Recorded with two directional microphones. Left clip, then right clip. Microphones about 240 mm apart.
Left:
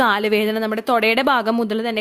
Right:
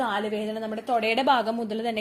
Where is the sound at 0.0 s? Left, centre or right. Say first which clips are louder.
Left 10 dB; left.